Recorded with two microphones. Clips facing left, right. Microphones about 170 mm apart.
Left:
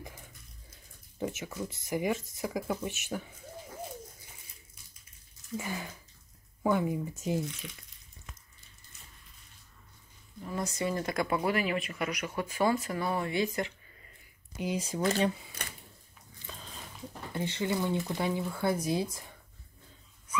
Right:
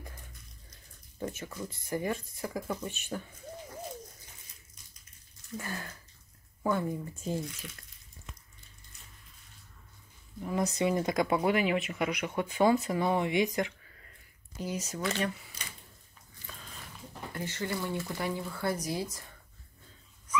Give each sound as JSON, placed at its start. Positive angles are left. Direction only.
{"t": 1.4, "sound": "speech", "side_deg": 10}
{"t": 5.5, "sound": "speech", "side_deg": 10}
{"t": 10.4, "sound": "speech", "side_deg": -15}
{"t": 14.9, "sound": "speech", "side_deg": 30}
{"t": 15.6, "sound": "a sound", "side_deg": 60}
{"t": 17.3, "sound": "speech", "side_deg": 20}
{"t": 18.8, "sound": "speech", "side_deg": 25}